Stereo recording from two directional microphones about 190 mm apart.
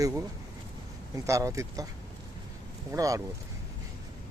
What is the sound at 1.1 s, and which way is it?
Speech, 15° right (ahead or behind).